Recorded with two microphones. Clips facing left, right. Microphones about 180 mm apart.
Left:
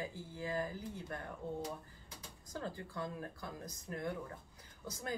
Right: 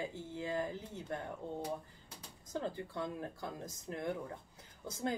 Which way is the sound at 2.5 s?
20° right (ahead or behind).